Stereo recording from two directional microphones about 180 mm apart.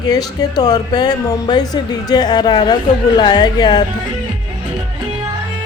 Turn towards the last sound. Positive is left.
turn(degrees=25)  # may be behind; listen again after turning